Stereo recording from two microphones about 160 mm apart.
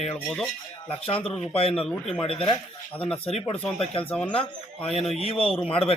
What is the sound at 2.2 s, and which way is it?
Speech, 35° left (ahead or behind).